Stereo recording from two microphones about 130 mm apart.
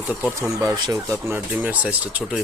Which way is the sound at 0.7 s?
35° right (ahead or behind).